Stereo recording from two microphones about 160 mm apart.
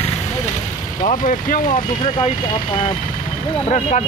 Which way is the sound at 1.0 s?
55° left (ahead or behind).